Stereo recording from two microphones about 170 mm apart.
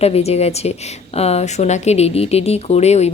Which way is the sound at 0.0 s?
40° left (ahead or behind).